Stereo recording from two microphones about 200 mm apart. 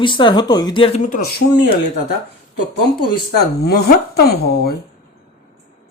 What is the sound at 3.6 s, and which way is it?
Speech, 55° left (ahead or behind).